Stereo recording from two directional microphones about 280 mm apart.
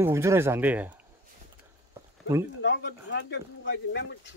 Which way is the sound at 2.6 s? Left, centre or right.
Left.